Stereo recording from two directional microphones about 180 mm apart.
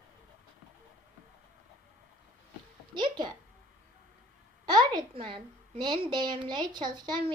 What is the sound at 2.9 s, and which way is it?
Music, 25° right (ahead or behind).